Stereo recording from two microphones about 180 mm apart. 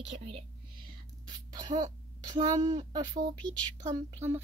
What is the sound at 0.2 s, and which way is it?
Whispering, 30° right (ahead or behind).